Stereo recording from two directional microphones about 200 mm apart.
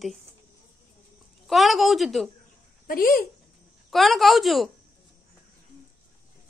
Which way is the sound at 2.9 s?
45° left (ahead or behind).